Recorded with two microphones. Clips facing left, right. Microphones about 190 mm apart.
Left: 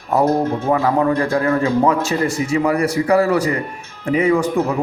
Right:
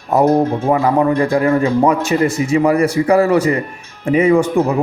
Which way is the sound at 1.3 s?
15° right (ahead or behind).